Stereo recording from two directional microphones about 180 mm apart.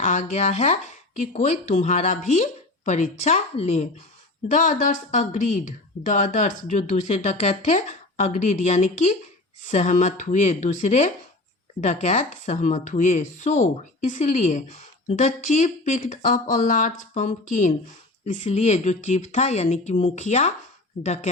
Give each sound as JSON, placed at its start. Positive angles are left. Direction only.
{"t": 0.0, "sound": "speech", "side_deg": 40}